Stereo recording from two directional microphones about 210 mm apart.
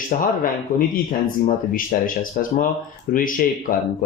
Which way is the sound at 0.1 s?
40° left (ahead or behind).